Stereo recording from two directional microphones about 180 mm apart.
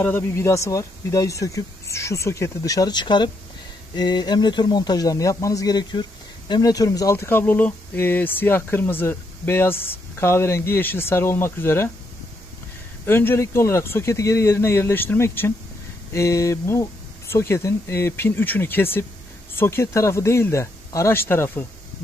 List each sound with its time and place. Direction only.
0.0 s speech: 10° left (ahead or behind)
13.0 s speech: 15° left (ahead or behind)